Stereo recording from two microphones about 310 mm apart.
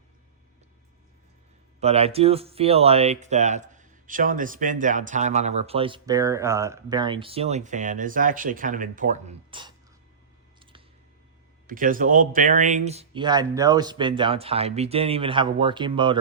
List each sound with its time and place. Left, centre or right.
1.8 s speech: centre
10.6 s a sound: centre
11.7 s speech: right